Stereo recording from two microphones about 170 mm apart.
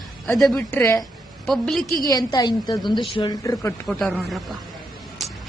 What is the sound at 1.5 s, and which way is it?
Speech, centre (ahead or behind).